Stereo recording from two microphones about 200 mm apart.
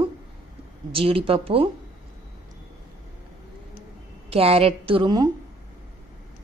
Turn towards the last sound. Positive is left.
turn(degrees=-20)  # may be behind; listen again after turning